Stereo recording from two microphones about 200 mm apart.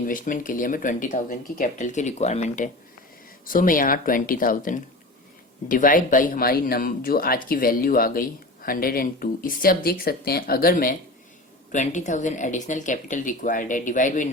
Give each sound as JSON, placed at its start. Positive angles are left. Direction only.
{"t": 0.0, "sound": "speech", "side_deg": 40}